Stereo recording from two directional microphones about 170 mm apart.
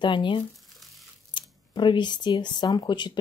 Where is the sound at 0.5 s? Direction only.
Centre (ahead or behind).